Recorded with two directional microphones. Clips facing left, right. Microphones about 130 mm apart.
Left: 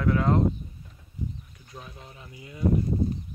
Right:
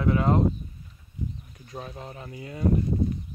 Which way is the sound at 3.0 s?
35° left (ahead or behind).